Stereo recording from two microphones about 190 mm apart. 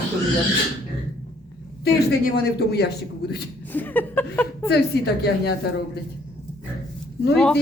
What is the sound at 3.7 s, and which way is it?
Speech, 10° left (ahead or behind).